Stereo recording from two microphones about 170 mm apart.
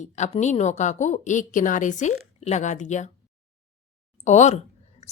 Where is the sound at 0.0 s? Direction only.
45° left (ahead or behind).